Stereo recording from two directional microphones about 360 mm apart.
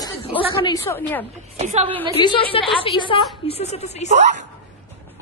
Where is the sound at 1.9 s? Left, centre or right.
Centre.